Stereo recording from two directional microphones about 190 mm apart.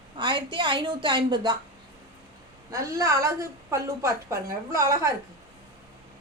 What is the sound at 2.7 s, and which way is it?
A woman's voice, 15° right (ahead or behind).